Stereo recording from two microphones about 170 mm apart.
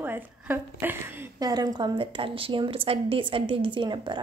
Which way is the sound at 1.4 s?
20° right (ahead or behind).